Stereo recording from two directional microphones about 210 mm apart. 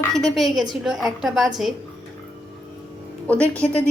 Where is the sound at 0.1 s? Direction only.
Centre (ahead or behind).